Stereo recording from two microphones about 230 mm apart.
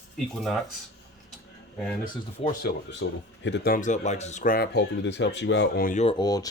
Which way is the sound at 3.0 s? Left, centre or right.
Left.